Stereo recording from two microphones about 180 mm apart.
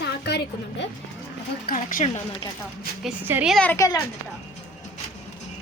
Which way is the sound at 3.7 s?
15° left (ahead or behind).